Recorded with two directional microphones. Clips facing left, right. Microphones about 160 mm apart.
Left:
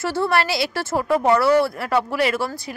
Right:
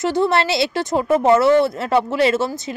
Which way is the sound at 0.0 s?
20° right (ahead or behind).